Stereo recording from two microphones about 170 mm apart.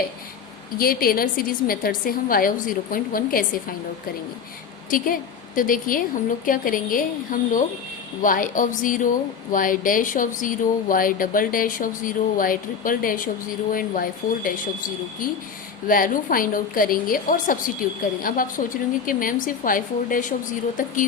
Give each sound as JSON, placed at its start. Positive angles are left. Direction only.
{"t": 0.8, "sound": "a woman's voice", "side_deg": 60}
{"t": 4.9, "sound": "a woman's voice", "side_deg": 55}